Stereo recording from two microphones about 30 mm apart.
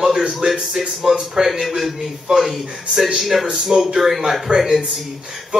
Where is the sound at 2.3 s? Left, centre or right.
Centre.